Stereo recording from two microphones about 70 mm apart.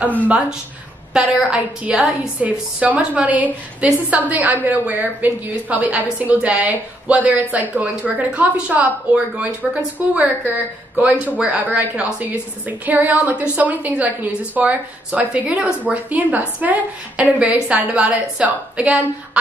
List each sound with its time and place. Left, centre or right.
1.1 s speech: centre